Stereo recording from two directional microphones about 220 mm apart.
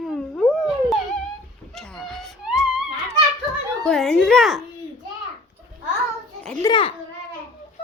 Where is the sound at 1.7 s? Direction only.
Centre (ahead or behind).